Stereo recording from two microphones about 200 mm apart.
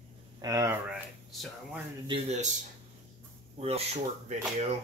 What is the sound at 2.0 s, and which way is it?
Speech, 30° right (ahead or behind).